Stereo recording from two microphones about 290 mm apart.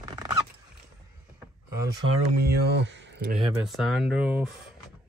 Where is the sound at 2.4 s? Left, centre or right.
Right.